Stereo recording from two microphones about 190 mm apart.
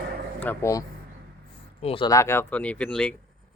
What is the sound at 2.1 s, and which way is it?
Speech, 15° left (ahead or behind).